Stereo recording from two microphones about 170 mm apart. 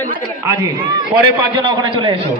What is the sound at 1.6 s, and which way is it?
Speech, 30° right (ahead or behind).